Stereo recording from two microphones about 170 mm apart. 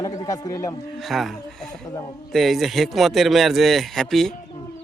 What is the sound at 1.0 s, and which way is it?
Speech, centre (ahead or behind).